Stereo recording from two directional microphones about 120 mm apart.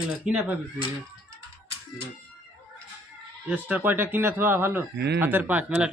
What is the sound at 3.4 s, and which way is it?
Speech, 15° right (ahead or behind).